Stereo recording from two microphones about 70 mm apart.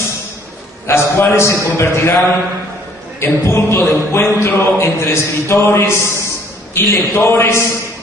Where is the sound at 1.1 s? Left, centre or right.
Left.